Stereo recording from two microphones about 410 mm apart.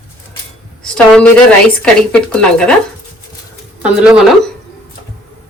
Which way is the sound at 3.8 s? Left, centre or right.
Centre.